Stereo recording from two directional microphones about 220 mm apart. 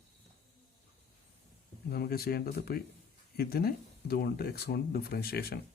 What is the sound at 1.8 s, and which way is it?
Speech, 45° left (ahead or behind).